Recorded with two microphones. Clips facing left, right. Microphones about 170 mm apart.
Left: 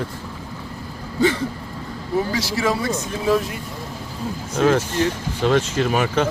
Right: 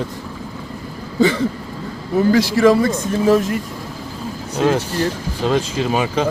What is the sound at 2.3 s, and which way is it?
Speech, 50° right (ahead or behind).